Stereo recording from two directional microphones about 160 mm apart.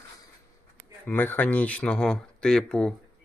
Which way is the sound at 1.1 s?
10° left (ahead or behind).